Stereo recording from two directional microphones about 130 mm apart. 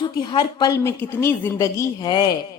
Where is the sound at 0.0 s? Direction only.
35° left (ahead or behind).